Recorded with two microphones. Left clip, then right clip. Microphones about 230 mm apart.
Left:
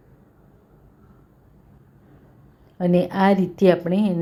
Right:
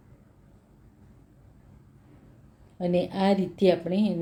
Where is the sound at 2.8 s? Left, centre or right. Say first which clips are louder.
Left 6 dB; centre.